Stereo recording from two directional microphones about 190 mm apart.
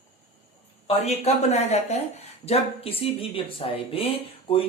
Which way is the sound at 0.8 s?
35° left (ahead or behind).